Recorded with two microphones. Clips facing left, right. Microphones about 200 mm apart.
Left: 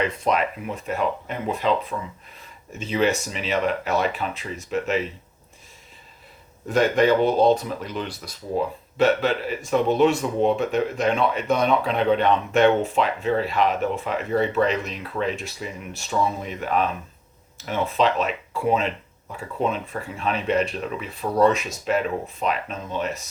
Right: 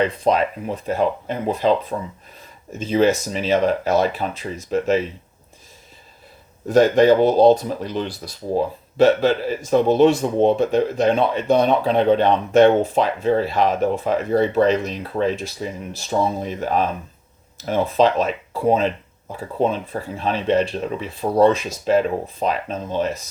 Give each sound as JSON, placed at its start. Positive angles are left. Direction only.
{"t": 0.0, "sound": "speech", "side_deg": -30}
{"t": 6.7, "sound": "speech", "side_deg": -40}